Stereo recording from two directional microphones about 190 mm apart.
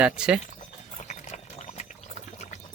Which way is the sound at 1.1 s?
35° left (ahead or behind).